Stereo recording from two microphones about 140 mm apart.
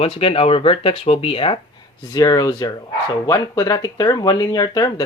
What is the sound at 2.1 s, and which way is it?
Speech, 25° left (ahead or behind).